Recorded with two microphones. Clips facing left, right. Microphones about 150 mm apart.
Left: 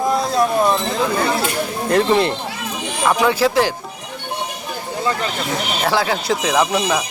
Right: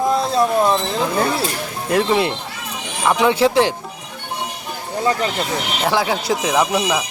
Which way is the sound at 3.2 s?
25° right (ahead or behind).